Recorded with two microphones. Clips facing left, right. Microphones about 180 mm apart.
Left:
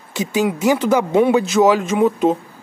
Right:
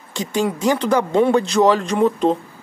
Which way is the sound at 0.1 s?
5° left (ahead or behind).